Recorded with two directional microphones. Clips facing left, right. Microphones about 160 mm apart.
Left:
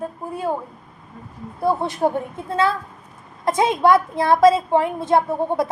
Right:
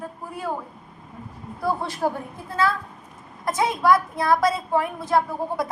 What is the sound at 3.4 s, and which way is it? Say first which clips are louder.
A woman's voice: left 4 dB; 25° left (ahead or behind).